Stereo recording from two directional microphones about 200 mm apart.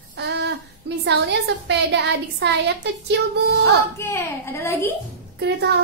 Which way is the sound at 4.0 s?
10° left (ahead or behind).